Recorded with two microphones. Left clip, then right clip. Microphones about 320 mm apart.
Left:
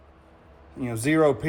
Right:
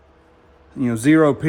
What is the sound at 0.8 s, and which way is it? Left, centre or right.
Speech, right.